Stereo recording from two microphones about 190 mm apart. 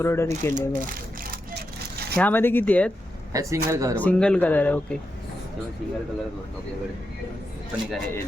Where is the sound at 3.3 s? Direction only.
15° right (ahead or behind).